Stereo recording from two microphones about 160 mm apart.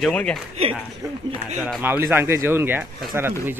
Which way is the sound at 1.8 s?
15° right (ahead or behind).